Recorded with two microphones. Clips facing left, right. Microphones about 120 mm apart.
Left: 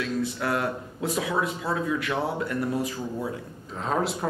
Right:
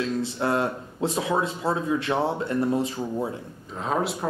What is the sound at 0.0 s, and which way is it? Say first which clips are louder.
Speech: right 2 dB; 30° right (ahead or behind).